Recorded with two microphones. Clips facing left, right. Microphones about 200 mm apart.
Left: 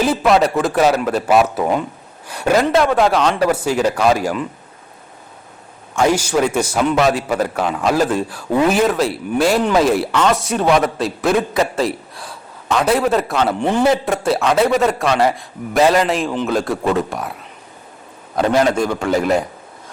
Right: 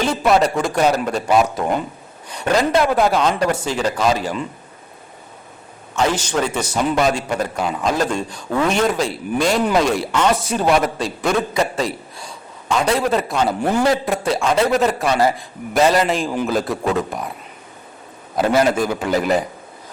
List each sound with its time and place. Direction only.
0.0 s a man's voice: 5° left (ahead or behind)
6.0 s a man's voice: 10° left (ahead or behind)
18.3 s a man's voice: 5° right (ahead or behind)